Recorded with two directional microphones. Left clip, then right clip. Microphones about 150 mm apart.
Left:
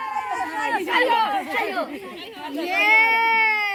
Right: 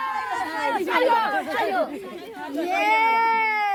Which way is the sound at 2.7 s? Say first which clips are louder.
Left 3 dB; 20° right (ahead or behind).